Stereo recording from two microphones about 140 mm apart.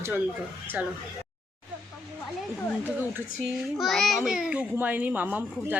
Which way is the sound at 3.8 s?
Centre (ahead or behind).